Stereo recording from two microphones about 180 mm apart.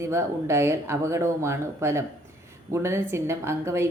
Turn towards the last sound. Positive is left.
turn(degrees=-15)  # may be behind; listen again after turning